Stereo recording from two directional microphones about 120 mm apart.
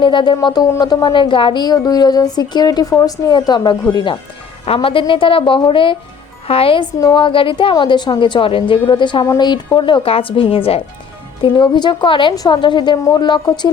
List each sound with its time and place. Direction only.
0.0 s a woman's voice: 40° left (ahead or behind)
4.6 s a woman's voice: 50° left (ahead or behind)
11.5 s a woman's voice: 40° left (ahead or behind)